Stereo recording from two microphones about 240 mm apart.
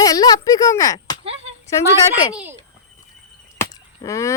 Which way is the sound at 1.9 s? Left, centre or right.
Centre.